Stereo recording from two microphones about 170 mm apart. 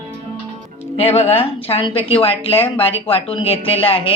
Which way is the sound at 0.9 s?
35° left (ahead or behind).